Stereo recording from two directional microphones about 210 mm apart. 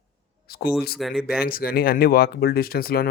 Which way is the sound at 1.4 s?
45° left (ahead or behind).